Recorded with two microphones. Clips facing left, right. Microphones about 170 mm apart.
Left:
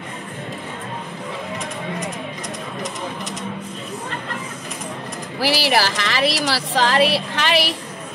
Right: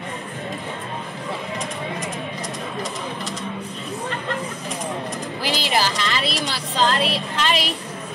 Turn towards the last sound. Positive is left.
turn(degrees=75)  # may be behind; listen again after turning